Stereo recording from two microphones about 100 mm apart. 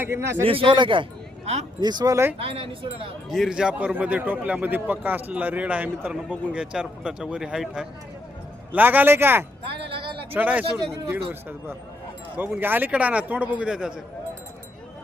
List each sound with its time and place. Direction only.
0.0 s speech: 25° right (ahead or behind)
0.4 s speech: 65° right (ahead or behind)
1.8 s speech: 45° right (ahead or behind)
2.4 s speech: 60° right (ahead or behind)
3.2 s a man's voice: centre (ahead or behind)
8.7 s speech: 15° right (ahead or behind)
9.6 s a sound: 60° right (ahead or behind)
10.3 s a man's voice: 15° right (ahead or behind)